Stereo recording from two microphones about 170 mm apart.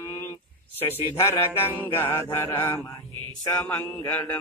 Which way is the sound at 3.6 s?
10° left (ahead or behind).